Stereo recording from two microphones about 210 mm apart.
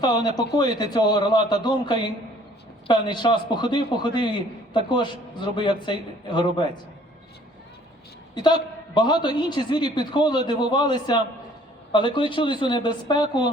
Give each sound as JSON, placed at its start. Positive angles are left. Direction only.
{"t": 0.0, "sound": "a man's voice", "side_deg": 20}
{"t": 9.0, "sound": "a man's voice", "side_deg": 20}